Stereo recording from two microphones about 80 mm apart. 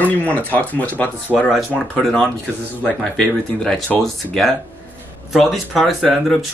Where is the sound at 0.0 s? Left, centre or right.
Centre.